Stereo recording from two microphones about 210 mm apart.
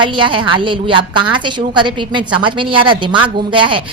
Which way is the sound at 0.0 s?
25° right (ahead or behind).